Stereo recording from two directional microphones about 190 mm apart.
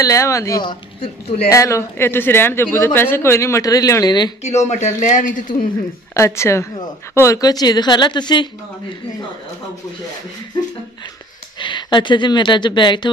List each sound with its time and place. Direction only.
0.0 s speech: 15° left (ahead or behind)
1.5 s speech: 15° left (ahead or behind)
4.4 s speech: 35° left (ahead or behind)
6.1 s a woman's voice: 15° left (ahead or behind)
11.6 s speech: 25° left (ahead or behind)